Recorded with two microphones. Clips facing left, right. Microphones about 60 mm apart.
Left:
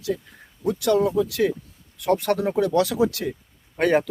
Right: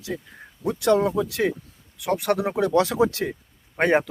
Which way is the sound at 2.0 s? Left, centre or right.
Centre.